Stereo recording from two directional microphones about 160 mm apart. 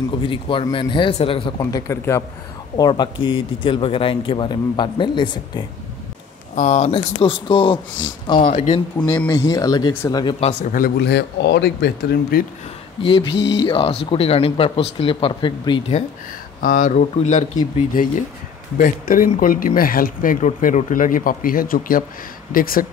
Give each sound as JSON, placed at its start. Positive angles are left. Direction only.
{"t": 0.2, "sound": "speech", "side_deg": 30}
{"t": 2.8, "sound": "speech", "side_deg": 30}
{"t": 6.5, "sound": "speech", "side_deg": 50}
{"t": 8.4, "sound": "speech", "side_deg": 50}
{"t": 9.3, "sound": "speech", "side_deg": 20}
{"t": 10.7, "sound": "speech", "side_deg": 75}
{"t": 13.0, "sound": "speech", "side_deg": 30}
{"t": 13.3, "sound": "speech", "side_deg": 90}
{"t": 13.7, "sound": "speech", "side_deg": 35}
{"t": 16.6, "sound": "speech", "side_deg": 60}